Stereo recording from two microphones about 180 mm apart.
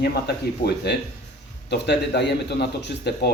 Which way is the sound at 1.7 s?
70° left (ahead or behind).